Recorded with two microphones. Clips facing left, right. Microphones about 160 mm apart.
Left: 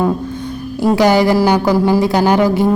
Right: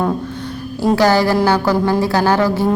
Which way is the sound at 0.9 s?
15° left (ahead or behind).